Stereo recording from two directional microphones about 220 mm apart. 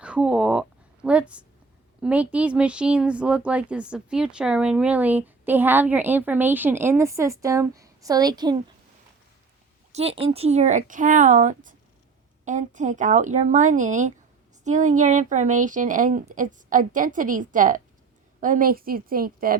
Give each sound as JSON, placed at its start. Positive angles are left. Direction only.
{"t": 0.0, "sound": "a woman's voice", "side_deg": -5}
{"t": 9.9, "sound": "speech", "side_deg": -25}